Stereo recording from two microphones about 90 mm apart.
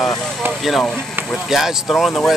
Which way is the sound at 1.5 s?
Centre (ahead or behind).